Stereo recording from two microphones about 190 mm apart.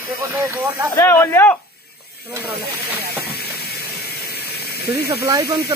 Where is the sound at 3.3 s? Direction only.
55° left (ahead or behind).